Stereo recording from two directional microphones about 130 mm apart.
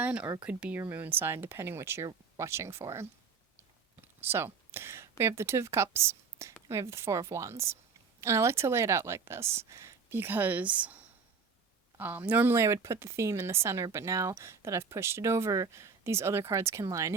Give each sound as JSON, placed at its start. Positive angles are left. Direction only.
{"t": 0.0, "sound": "speech", "side_deg": -10}
{"t": 4.2, "sound": "speech", "side_deg": -20}